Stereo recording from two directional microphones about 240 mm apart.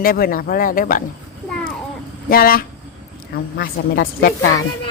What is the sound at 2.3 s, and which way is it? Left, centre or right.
Speech, left.